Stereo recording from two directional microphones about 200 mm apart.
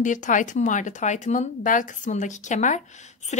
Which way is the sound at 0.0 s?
40° left (ahead or behind).